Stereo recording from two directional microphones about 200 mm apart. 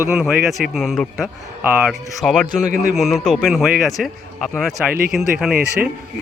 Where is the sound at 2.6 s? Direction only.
40° right (ahead or behind).